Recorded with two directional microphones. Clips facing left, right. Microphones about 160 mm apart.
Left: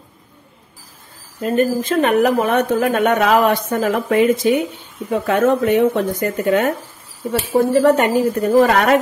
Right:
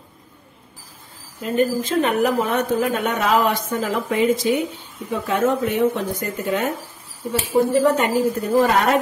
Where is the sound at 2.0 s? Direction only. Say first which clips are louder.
Left 7 dB; 70° left (ahead or behind).